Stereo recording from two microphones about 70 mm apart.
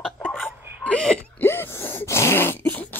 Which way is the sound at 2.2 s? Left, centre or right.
Left.